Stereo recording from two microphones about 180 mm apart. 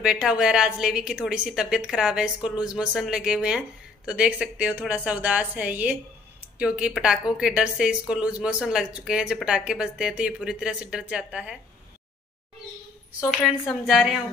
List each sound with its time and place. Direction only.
0.0 s a woman's voice: 5° right (ahead or behind)
13.2 s a woman's voice: 5° right (ahead or behind)